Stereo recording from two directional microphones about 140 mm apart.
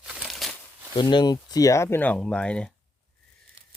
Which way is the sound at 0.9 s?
30° left (ahead or behind).